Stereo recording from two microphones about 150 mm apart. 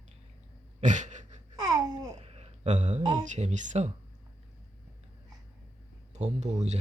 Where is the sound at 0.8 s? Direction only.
55° right (ahead or behind).